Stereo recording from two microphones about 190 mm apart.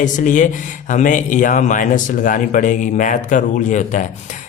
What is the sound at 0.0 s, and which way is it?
Speech, 40° left (ahead or behind).